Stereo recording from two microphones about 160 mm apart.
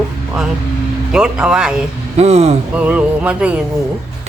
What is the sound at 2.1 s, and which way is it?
Speech, 45° right (ahead or behind).